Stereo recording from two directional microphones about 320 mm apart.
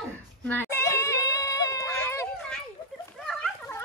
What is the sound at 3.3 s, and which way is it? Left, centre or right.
Dog, centre.